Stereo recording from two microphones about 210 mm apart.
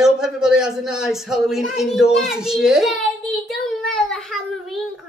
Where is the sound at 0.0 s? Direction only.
5° right (ahead or behind).